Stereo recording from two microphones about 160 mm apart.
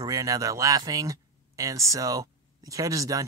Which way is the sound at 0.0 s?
20° right (ahead or behind).